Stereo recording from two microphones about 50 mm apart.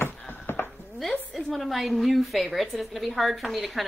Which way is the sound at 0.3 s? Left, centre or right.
Left.